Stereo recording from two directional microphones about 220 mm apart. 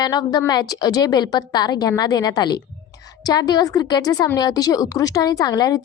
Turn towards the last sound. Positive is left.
turn(degrees=15)  # may be behind; listen again after turning